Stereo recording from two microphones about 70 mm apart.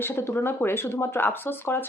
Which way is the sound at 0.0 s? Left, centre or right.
Left.